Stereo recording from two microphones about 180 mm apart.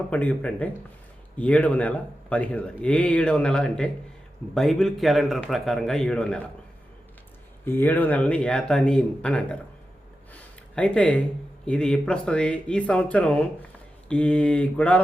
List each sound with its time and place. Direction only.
0.1 s a man's voice: 10° left (ahead or behind)
7.6 s speech: 10° left (ahead or behind)
10.3 s a sound: 5° left (ahead or behind)
11.6 s a man's voice: 5° left (ahead or behind)